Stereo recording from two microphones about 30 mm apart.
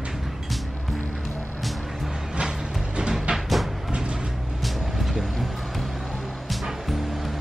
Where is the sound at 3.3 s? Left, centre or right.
Centre.